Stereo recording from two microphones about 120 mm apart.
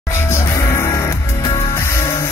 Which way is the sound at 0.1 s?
20° left (ahead or behind).